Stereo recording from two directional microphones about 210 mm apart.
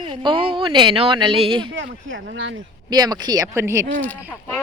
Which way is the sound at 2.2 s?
55° right (ahead or behind).